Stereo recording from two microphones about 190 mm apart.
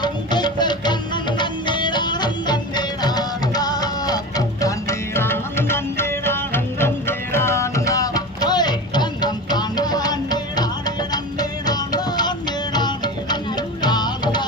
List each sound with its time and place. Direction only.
0.0 s music: 25° left (ahead or behind)